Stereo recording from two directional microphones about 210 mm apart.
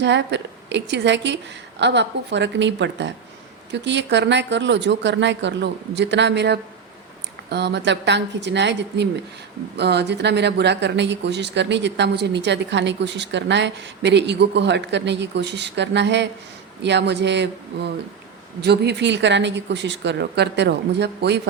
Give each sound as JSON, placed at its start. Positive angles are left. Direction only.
{"t": 0.0, "sound": "speech", "side_deg": -55}